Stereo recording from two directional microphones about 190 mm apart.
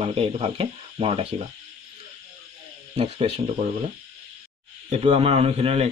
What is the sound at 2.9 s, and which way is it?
Speech, 35° right (ahead or behind).